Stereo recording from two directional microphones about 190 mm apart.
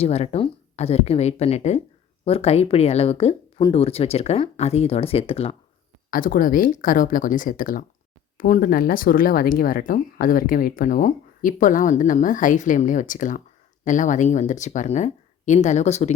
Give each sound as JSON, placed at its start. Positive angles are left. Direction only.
{"t": 0.0, "sound": "speech", "side_deg": 35}
{"t": 6.1, "sound": "speech", "side_deg": 45}